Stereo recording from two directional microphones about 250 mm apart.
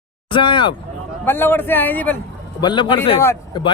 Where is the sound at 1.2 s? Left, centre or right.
Centre.